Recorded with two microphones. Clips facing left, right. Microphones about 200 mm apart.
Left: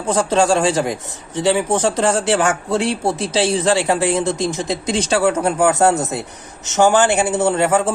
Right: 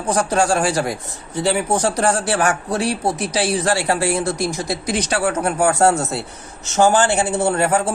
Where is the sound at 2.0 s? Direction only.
25° left (ahead or behind).